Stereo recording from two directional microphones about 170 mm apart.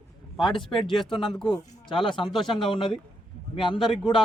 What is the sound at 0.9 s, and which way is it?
Speech, centre (ahead or behind).